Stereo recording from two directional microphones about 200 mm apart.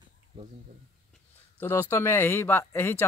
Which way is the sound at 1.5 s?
10° left (ahead or behind).